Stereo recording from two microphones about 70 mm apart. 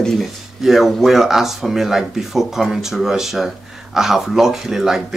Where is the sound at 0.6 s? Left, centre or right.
Centre.